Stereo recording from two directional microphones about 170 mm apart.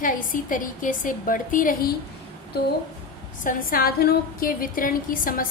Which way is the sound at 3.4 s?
55° left (ahead or behind).